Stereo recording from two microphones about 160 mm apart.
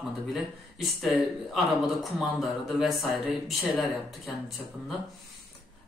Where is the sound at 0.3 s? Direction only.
Centre (ahead or behind).